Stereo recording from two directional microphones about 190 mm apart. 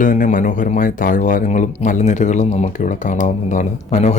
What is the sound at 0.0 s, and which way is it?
Speech, 45° left (ahead or behind).